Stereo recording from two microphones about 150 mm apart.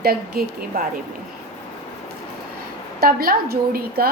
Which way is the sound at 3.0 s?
85° right.